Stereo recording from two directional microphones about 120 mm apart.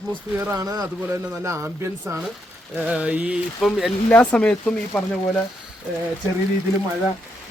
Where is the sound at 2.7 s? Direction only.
10° right (ahead or behind).